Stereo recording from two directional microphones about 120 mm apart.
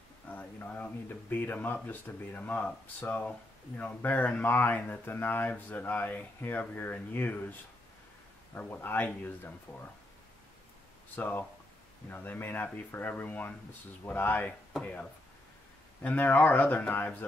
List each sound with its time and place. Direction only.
0.3 s speech: 15° left (ahead or behind)
8.5 s speech: 15° left (ahead or behind)
11.1 s speech: 15° left (ahead or behind)